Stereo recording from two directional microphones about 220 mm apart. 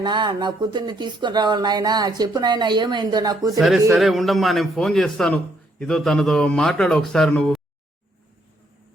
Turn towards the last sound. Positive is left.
turn(degrees=0)  # may be behind; listen again after turning